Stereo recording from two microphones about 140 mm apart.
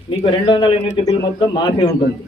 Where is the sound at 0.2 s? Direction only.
35° left (ahead or behind).